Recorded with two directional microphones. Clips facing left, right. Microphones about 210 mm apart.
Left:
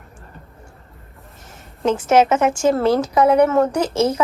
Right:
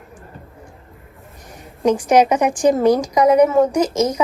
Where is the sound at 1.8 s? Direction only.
15° right (ahead or behind).